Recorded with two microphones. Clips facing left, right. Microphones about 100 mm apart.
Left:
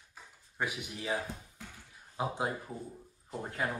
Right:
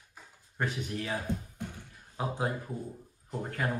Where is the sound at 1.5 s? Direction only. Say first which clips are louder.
Right 9 dB; 45° right (ahead or behind).